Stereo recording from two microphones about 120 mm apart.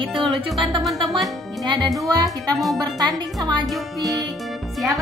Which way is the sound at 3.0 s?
35° right (ahead or behind).